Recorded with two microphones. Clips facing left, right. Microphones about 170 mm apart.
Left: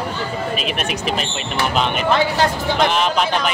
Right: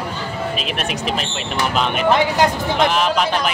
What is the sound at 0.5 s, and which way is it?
Speech, centre (ahead or behind).